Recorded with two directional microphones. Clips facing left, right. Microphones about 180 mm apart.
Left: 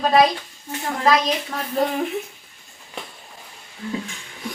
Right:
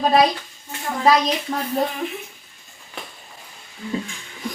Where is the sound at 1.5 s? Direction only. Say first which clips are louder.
Right 4 dB; 25° right (ahead or behind).